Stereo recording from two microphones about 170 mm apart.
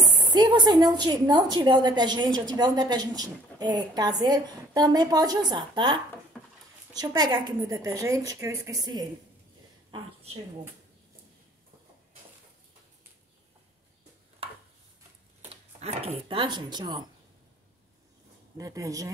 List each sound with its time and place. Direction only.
0.0 s a woman's voice: 25° right (ahead or behind)
9.8 s a sound: 30° right (ahead or behind)
15.8 s a woman's voice: 40° right (ahead or behind)
18.6 s a woman's voice: 20° right (ahead or behind)